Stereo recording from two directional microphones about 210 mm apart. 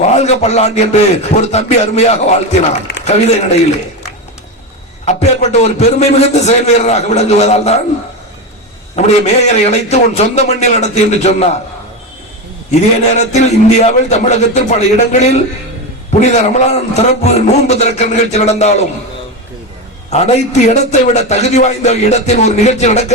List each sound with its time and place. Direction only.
0.1 s a man's voice: 30° left (ahead or behind)
5.0 s a man's voice: 30° left (ahead or behind)
9.0 s a man's voice: 30° left (ahead or behind)
12.7 s a man's voice: 35° left (ahead or behind)
20.1 s a man's voice: 30° left (ahead or behind)